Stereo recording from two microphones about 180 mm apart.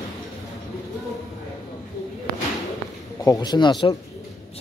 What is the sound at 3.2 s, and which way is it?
Speech, 20° left (ahead or behind).